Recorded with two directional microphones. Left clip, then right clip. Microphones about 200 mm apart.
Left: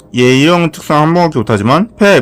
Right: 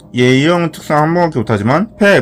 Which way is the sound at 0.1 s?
25° left (ahead or behind).